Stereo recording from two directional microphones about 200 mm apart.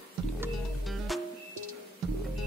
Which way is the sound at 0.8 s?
Centre (ahead or behind).